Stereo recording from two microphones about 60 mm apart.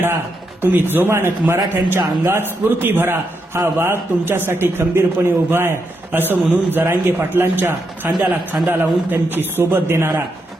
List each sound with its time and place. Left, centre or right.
0.6 s a man's voice: right